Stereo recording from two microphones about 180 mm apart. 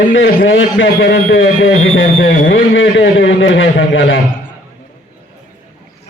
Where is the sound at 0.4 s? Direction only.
90° left.